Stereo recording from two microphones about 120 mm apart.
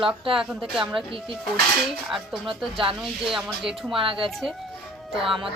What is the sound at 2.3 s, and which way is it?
Speech, 45° right (ahead or behind).